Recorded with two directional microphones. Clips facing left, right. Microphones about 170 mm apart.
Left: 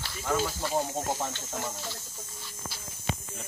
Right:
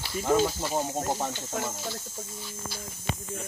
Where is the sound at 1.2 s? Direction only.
Centre (ahead or behind).